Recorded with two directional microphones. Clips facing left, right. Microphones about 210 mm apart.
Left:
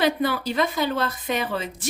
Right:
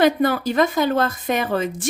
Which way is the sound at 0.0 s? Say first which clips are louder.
Right 5 dB; 50° right (ahead or behind).